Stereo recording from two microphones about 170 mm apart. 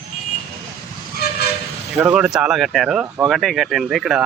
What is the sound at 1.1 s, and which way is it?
Train, 65° left (ahead or behind).